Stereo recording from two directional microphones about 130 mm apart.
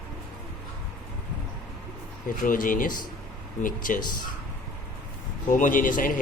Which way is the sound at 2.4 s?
90° left.